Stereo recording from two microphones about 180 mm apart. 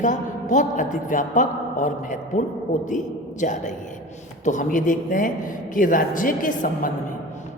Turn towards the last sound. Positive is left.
turn(degrees=50)  # may be behind; listen again after turning